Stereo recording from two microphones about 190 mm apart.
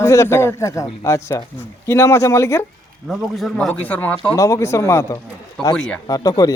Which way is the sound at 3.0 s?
Centre (ahead or behind).